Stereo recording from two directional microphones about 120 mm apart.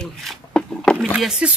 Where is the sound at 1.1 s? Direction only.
5° right (ahead or behind).